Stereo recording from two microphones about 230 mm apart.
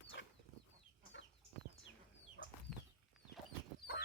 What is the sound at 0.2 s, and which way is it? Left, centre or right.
Chicken, left.